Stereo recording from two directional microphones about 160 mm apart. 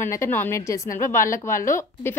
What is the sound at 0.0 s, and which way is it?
A woman's voice, 15° left (ahead or behind).